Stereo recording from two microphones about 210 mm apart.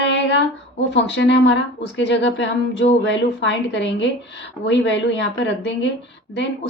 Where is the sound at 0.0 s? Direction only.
60° left (ahead or behind).